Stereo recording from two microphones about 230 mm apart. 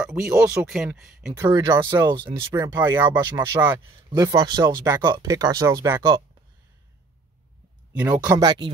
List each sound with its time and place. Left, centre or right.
0.0 s speech: centre
1.3 s speech: centre
8.0 s speech: centre